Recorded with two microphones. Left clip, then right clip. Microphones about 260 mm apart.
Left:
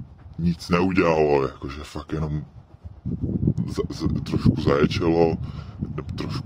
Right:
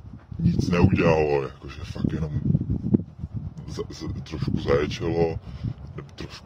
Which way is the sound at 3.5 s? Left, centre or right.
Left.